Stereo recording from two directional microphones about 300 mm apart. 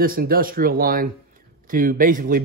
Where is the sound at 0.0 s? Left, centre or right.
Right.